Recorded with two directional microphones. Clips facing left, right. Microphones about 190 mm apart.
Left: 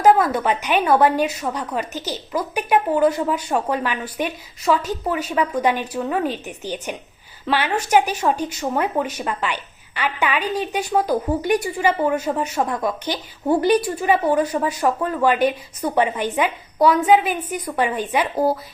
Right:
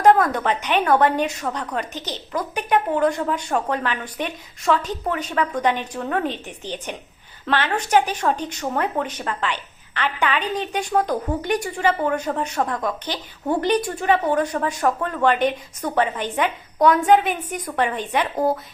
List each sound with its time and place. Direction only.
0.0 s speech: 5° left (ahead or behind)